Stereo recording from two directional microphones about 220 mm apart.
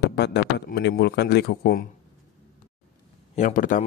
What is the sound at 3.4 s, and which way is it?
Speech, 35° left (ahead or behind).